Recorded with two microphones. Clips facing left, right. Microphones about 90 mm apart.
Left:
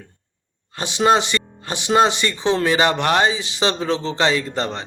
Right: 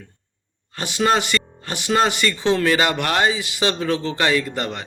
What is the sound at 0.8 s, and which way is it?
Speech, 20° left (ahead or behind).